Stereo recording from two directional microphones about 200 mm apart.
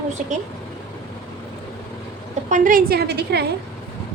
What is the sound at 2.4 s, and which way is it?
A woman's voice, 40° right (ahead or behind).